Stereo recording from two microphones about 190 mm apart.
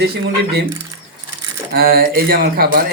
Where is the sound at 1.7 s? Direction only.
55° right (ahead or behind).